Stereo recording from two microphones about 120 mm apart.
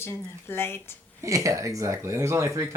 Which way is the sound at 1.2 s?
25° right (ahead or behind).